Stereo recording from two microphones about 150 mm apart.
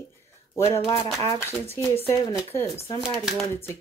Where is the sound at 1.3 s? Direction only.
20° left (ahead or behind).